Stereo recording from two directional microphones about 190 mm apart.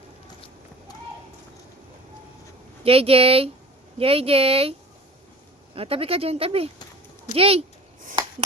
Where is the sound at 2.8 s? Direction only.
30° right (ahead or behind).